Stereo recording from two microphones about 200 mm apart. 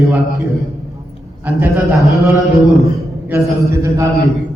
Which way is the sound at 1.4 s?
10° right (ahead or behind).